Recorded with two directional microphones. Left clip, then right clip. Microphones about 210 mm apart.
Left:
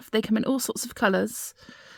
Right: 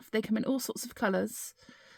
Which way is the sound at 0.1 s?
30° left (ahead or behind).